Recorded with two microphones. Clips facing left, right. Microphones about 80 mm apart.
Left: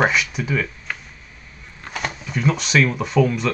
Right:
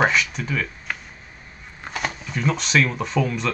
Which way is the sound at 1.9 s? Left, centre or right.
Centre.